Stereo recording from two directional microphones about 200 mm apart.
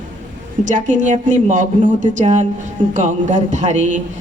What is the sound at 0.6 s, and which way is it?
A woman's voice, 40° right (ahead or behind).